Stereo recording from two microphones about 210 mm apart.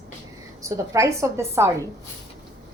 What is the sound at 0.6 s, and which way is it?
A woman's voice, 15° right (ahead or behind).